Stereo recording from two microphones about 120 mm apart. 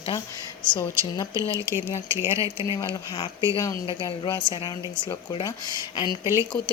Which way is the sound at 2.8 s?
40° left (ahead or behind).